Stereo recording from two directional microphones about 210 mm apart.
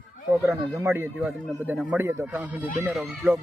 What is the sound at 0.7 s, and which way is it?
Speech, 10° right (ahead or behind).